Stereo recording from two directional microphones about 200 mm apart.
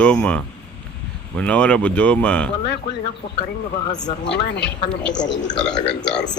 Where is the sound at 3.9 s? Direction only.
20° left (ahead or behind).